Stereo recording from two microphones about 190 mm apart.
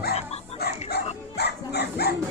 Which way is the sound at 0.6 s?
60° left (ahead or behind).